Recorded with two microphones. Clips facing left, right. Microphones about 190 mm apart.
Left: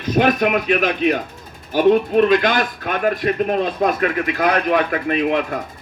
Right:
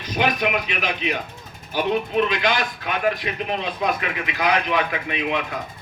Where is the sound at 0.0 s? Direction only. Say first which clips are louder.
Left 6 dB; 50° left (ahead or behind).